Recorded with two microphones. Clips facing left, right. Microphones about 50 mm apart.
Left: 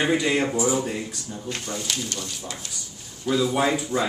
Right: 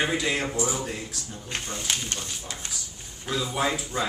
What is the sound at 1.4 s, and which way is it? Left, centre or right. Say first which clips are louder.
Speech: left 1 dB; right.